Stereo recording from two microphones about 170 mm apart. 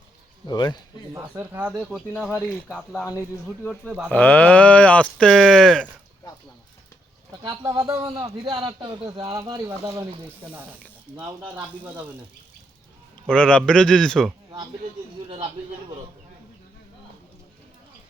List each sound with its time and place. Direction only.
0.4 s speech: 25° left (ahead or behind)
1.1 s a man's voice: 15° right (ahead or behind); by 5.9 s 5° left (ahead or behind)
7.4 s a man's voice: 20° right (ahead or behind)
11.3 s speech: 10° right (ahead or behind)
13.2 s a man's voice: 5° left (ahead or behind)